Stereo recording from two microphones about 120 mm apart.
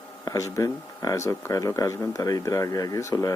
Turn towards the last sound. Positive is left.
turn(degrees=25)  # may be behind; listen again after turning